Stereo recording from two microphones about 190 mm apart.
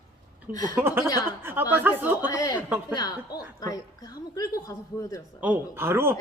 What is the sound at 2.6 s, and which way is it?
Speech, 10° right (ahead or behind).